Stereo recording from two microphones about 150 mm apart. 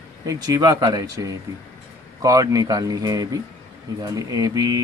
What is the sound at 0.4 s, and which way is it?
Speech, 25° right (ahead or behind).